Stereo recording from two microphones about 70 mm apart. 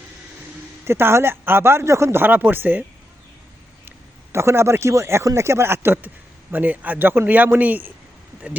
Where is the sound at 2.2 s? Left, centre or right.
Right.